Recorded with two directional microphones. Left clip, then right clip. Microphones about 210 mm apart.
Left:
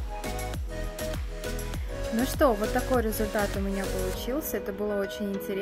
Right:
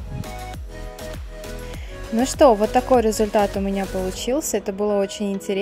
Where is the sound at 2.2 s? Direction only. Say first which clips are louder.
Right 10 dB; 25° right (ahead or behind).